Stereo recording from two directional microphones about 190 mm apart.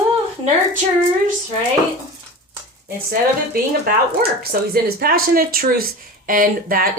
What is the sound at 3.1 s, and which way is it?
Speech, 55° right (ahead or behind).